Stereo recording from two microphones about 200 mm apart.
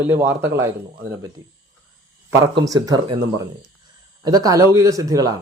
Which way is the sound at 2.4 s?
20° right (ahead or behind).